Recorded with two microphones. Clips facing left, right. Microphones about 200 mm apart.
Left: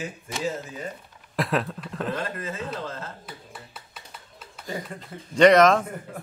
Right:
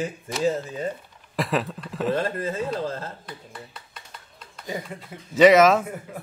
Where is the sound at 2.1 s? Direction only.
30° right (ahead or behind).